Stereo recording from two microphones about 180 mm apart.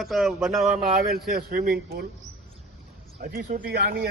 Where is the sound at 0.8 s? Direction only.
55° right (ahead or behind).